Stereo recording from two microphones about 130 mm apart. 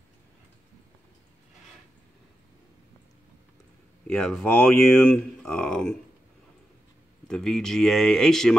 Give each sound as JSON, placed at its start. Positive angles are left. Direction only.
{"t": 4.1, "sound": "speech", "side_deg": 5}
{"t": 7.2, "sound": "speech", "side_deg": 5}